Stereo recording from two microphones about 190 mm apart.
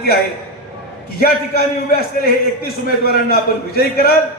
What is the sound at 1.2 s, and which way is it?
A man's voice, 55° left (ahead or behind).